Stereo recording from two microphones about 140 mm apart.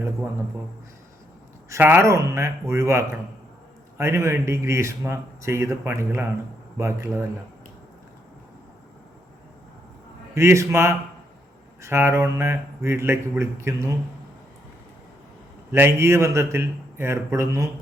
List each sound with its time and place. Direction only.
1.7 s speech: 15° right (ahead or behind)
10.3 s speech: 20° right (ahead or behind)
15.7 s speech: 15° right (ahead or behind)